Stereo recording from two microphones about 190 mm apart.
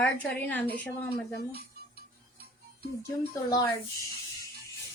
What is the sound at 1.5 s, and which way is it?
Cutlery, 55° right (ahead or behind).